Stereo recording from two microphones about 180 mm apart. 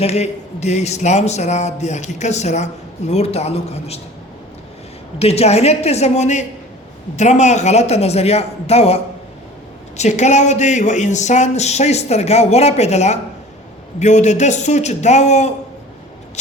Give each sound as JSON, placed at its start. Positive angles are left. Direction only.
{"t": 0.0, "sound": "speech", "side_deg": 35}
{"t": 5.2, "sound": "speech", "side_deg": 35}
{"t": 10.0, "sound": "speech", "side_deg": 40}